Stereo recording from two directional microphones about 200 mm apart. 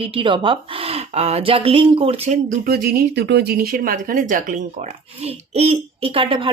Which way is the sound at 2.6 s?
50° right (ahead or behind).